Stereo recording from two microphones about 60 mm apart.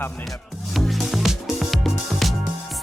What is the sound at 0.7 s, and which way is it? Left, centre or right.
Music, centre.